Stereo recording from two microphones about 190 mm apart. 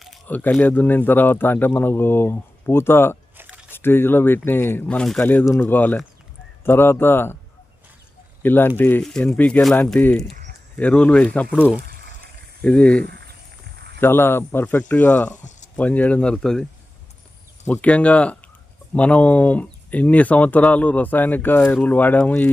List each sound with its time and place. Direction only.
0.0 s speech: 5° left (ahead or behind)
3.3 s a sound: 10° right (ahead or behind)
3.7 s speech: 10° left (ahead or behind)
8.4 s speech: 10° left (ahead or behind)
12.6 s speech: 5° left (ahead or behind)
13.7 s a sound: 60° right (ahead or behind)
14.0 s speech: 10° left (ahead or behind)
17.7 s speech: 5° left (ahead or behind)